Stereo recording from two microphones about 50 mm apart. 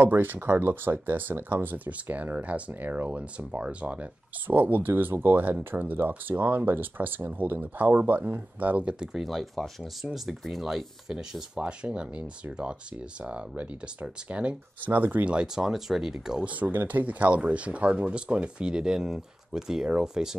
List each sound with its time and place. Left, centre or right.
0.0 s speech: right
9.0 s speech: centre
9.3 s speech: centre
11.6 s speech: right
14.9 s speech: right
15.2 s speech: centre
16.4 s speech: right; by 20.3 s centre